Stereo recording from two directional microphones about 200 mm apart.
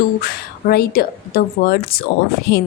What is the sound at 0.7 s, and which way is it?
A woman's voice, 50° left (ahead or behind).